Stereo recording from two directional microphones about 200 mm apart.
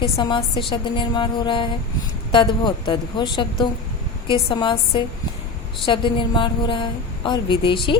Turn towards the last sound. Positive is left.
turn(degrees=25)  # may be behind; listen again after turning